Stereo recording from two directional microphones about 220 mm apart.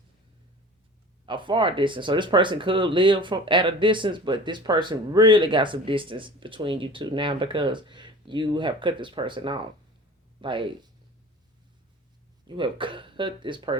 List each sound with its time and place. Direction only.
1.2 s speech: 20° right (ahead or behind)
12.5 s speech: 20° right (ahead or behind)